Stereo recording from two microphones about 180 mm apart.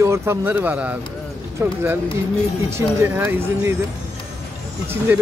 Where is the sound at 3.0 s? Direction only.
10° right (ahead or behind).